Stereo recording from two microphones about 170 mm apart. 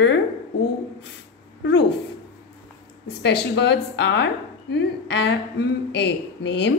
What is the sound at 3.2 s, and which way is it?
A woman's voice, 90° left.